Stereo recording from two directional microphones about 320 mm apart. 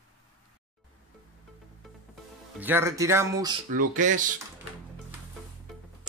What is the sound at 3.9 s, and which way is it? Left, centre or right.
Speech, right.